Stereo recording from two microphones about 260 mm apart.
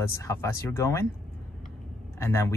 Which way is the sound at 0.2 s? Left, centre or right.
Centre.